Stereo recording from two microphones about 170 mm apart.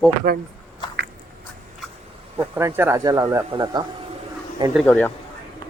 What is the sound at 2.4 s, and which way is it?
Speech, 15° right (ahead or behind).